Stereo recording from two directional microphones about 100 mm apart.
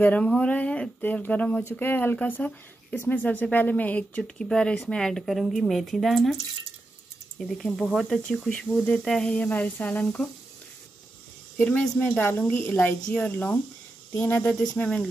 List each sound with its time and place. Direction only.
0.0 s speech: 15° left (ahead or behind)
1.6 s speech: 25° left (ahead or behind)
4.2 s speech: 5° left (ahead or behind)
11.5 s speech: 15° left (ahead or behind)